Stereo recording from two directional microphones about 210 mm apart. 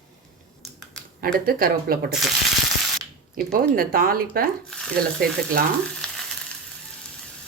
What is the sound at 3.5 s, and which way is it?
Speech, 45° right (ahead or behind).